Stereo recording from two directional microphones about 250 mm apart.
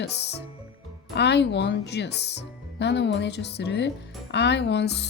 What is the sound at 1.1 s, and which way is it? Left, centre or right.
Speech, left.